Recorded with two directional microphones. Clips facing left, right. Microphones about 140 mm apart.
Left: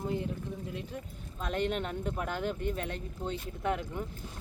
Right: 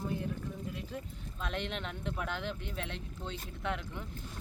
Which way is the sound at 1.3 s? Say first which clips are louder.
Left 6 dB; 40° left (ahead or behind).